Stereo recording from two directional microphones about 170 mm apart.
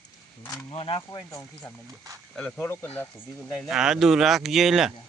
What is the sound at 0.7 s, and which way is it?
Speech, 35° left (ahead or behind).